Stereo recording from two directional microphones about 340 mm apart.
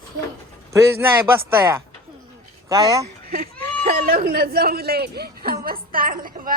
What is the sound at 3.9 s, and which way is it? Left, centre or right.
A man's voice, right.